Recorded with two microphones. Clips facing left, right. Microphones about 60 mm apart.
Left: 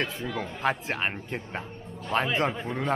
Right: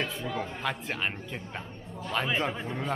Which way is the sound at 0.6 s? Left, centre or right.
Left.